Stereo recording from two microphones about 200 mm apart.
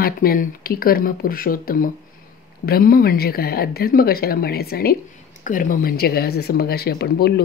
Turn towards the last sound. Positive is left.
turn(degrees=55)  # may be behind; listen again after turning